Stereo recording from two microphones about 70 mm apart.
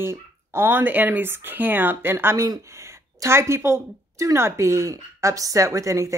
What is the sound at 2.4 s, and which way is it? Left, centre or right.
Speech, right.